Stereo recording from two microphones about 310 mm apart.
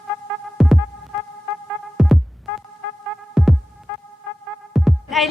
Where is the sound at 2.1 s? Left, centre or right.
Centre.